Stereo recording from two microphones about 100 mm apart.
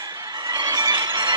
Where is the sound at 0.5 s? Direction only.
45° right (ahead or behind).